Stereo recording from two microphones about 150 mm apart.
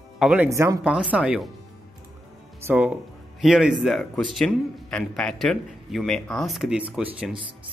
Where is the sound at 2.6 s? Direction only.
10° right (ahead or behind).